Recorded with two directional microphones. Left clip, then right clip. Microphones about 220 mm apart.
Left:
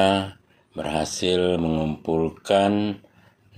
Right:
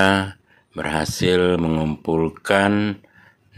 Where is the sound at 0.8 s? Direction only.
90° right.